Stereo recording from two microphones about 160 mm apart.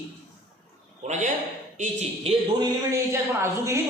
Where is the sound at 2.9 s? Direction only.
15° right (ahead or behind).